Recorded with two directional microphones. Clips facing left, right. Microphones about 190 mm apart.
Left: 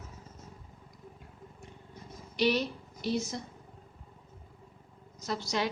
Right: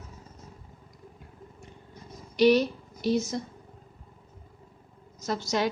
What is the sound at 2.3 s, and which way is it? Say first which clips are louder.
A woman's voice: right 8 dB; 45° right (ahead or behind).